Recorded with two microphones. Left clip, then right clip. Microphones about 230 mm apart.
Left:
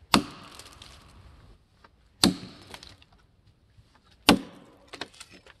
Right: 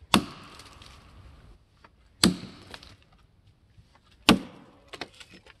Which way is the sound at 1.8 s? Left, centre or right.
Centre.